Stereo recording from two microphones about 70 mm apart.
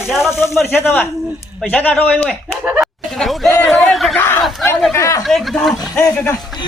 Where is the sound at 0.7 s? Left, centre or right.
Left.